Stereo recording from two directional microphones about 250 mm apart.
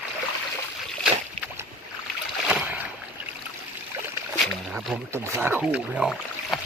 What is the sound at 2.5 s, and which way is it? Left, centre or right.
Boat, centre.